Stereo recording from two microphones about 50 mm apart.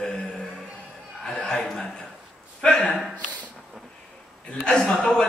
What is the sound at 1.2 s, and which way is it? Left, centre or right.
Speech, centre.